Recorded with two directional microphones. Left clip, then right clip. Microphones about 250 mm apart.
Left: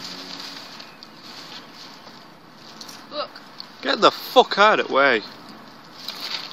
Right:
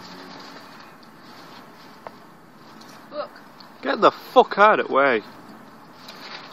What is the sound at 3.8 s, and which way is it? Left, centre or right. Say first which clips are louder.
Speech: left 1 dB; centre.